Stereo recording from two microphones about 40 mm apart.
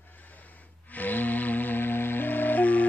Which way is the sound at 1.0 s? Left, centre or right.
Left.